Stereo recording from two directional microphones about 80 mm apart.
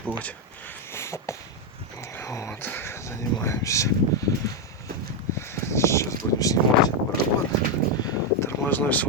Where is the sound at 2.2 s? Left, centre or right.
Left.